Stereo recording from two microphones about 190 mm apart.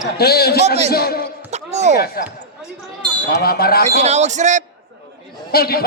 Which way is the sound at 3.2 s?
55° left (ahead or behind).